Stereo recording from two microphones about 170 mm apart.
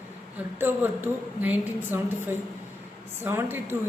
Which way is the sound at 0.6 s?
10° right (ahead or behind).